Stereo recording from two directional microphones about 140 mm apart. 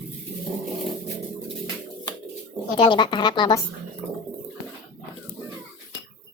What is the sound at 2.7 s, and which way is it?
Speech, 35° left (ahead or behind).